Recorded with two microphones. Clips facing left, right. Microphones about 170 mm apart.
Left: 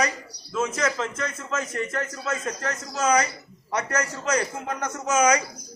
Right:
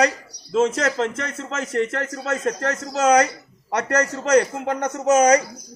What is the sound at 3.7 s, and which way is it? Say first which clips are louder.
Speech: right 4 dB; 70° right (ahead or behind).